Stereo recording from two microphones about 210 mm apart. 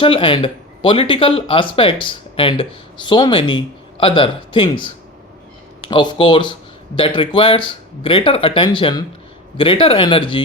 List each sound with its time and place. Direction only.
0.0 s speech: 25° left (ahead or behind)
5.9 s speech: 20° left (ahead or behind)